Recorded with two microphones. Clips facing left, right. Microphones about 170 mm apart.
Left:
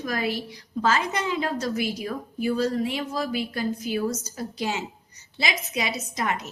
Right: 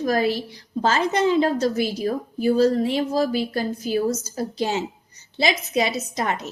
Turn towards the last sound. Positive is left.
turn(degrees=-30)  # may be behind; listen again after turning